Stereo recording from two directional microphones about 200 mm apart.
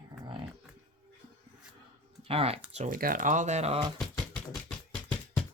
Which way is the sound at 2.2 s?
30° right (ahead or behind).